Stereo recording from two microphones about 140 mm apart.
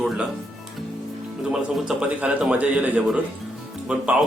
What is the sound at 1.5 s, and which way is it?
A man's voice, 5° right (ahead or behind).